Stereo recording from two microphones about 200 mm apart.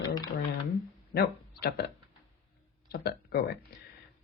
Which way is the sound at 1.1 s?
50° left (ahead or behind).